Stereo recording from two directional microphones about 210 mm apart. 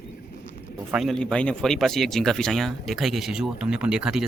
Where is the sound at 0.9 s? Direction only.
Centre (ahead or behind).